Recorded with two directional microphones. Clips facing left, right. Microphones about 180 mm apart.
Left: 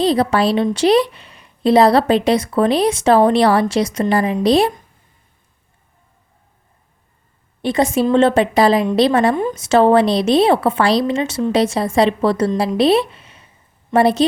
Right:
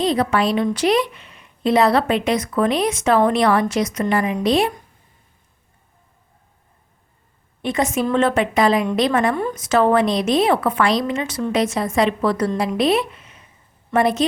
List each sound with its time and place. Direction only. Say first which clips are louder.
0.0 s a woman's voice: left 3 dB; 35° left (ahead or behind)
7.6 s a woman's voice: left 4 dB; 35° left (ahead or behind)